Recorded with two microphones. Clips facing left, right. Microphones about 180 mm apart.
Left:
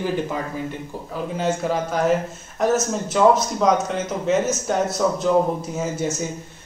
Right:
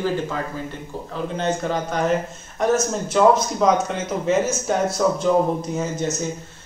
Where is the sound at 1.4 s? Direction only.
5° left (ahead or behind).